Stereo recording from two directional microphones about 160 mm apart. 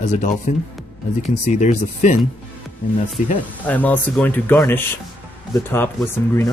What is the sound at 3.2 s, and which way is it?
Speech, 55° left (ahead or behind).